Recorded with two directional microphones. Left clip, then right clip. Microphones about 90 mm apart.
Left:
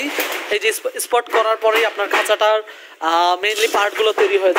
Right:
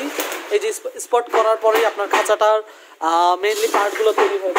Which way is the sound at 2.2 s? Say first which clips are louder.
Even; 60° right (ahead or behind).